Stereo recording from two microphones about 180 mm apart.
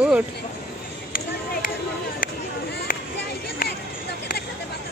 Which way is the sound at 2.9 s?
50° left (ahead or behind).